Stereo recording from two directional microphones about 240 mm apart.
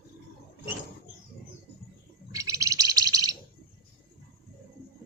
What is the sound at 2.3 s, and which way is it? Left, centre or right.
Bird, centre.